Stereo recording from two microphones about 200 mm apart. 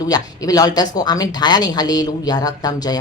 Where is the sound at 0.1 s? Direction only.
20° left (ahead or behind).